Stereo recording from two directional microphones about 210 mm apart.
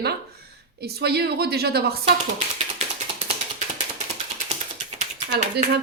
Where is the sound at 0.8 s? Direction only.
50° right (ahead or behind).